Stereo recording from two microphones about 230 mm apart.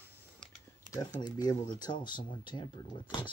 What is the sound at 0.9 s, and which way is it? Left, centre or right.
Speech, centre.